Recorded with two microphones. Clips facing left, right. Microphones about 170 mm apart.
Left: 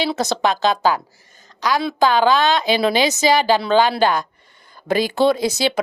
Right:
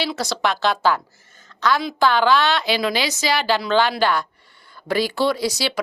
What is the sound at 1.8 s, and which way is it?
Speech, 15° left (ahead or behind).